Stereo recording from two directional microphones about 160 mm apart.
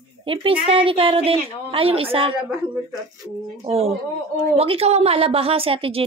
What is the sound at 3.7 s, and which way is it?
Speech, 40° right (ahead or behind).